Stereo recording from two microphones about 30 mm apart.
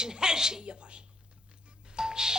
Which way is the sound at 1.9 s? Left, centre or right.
Right.